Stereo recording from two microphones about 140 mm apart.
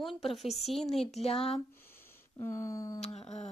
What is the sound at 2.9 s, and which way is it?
Speech, 55° left (ahead or behind).